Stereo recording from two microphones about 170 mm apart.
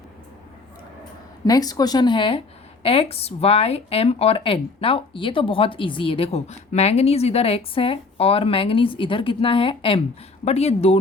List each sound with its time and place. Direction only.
1.5 s speech: 20° left (ahead or behind); by 10.9 s 40° left (ahead or behind)